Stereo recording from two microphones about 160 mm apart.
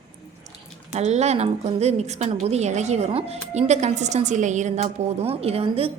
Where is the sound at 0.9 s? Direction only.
45° right (ahead or behind).